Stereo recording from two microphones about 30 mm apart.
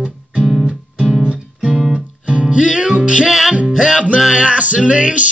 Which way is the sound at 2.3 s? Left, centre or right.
Right.